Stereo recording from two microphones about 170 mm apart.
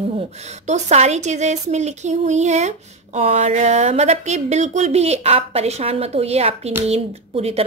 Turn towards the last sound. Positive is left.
turn(degrees=-35)  # may be behind; listen again after turning